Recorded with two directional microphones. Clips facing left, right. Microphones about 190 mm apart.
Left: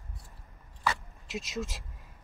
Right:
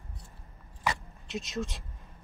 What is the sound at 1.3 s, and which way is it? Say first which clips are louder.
Speech: right 1 dB; centre (ahead or behind).